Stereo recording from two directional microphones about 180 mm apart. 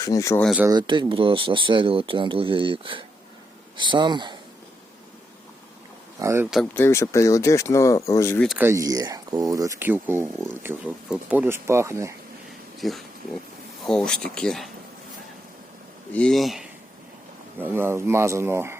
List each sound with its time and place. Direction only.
0.0 s speech: 20° left (ahead or behind)
0.7 s speech: 25° right (ahead or behind)
6.1 s speech: 15° right (ahead or behind)
6.7 s speech: 15° left (ahead or behind)
8.5 s speech: 15° right (ahead or behind)
12.8 s speech: centre (ahead or behind)
16.1 s speech: 5° left (ahead or behind)
17.6 s speech: 10° right (ahead or behind)